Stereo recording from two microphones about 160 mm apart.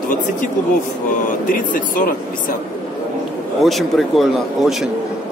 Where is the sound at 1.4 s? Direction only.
60° left (ahead or behind).